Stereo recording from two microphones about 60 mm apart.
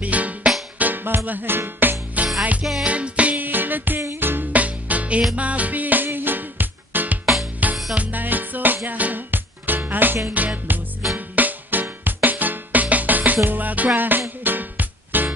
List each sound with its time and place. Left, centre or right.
0.0 s music: right
2.6 s music: centre
2.9 s music: right